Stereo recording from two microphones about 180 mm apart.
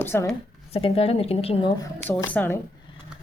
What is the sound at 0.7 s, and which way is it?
Speech, 30° left (ahead or behind).